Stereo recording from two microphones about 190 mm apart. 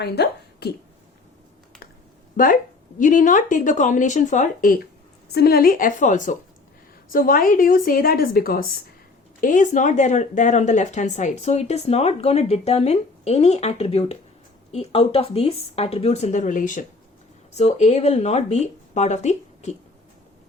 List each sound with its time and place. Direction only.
0.0 s a sound: 60° left (ahead or behind)
2.3 s speech: 50° left (ahead or behind)
5.3 s speech: 55° left (ahead or behind); by 19.7 s 35° left (ahead or behind)